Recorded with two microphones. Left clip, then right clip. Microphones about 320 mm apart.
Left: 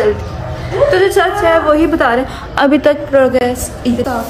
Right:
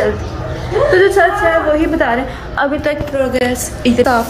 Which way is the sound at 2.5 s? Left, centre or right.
Left.